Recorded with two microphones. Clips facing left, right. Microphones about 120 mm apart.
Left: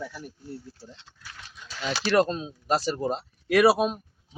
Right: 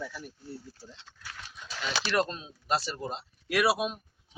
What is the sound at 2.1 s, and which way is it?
Speech, 35° left (ahead or behind).